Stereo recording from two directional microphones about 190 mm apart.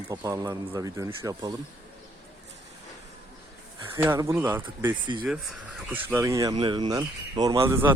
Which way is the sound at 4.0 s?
15° right (ahead or behind).